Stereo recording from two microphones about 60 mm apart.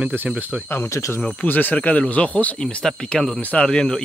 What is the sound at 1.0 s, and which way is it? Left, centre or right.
Speech, left.